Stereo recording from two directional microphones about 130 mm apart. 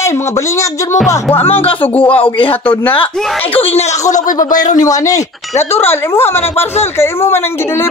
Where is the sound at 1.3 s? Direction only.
50° left (ahead or behind).